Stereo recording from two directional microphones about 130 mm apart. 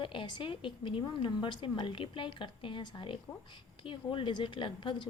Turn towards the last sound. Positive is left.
turn(degrees=40)  # may be behind; listen again after turning